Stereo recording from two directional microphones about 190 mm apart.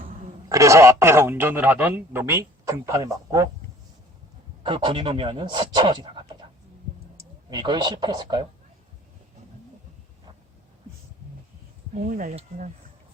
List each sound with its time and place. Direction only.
0.0 s speech: 20° right (ahead or behind)
4.6 s speech: 25° right (ahead or behind)
7.5 s speech: 25° right (ahead or behind)
12.0 s speech: 45° right (ahead or behind)